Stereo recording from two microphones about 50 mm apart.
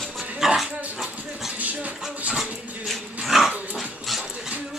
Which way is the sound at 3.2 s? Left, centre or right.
Centre.